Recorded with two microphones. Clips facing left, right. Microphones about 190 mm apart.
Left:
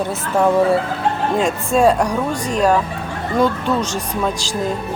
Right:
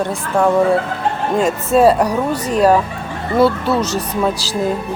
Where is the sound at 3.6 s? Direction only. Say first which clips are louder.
Right 2 dB; 40° right (ahead or behind).